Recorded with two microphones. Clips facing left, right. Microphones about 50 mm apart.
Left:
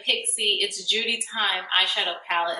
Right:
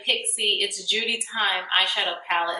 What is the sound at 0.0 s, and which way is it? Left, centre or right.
A woman's voice, centre.